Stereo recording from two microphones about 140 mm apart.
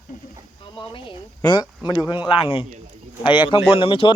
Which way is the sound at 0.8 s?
35° left (ahead or behind).